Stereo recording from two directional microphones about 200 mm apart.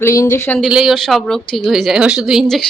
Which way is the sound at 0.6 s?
Centre (ahead or behind).